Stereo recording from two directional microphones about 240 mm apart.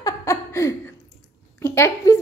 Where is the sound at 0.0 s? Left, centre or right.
Centre.